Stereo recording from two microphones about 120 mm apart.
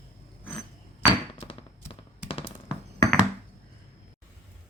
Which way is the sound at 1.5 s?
50° left (ahead or behind).